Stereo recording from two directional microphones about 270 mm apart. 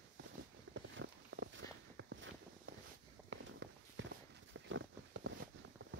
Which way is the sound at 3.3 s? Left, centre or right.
Right.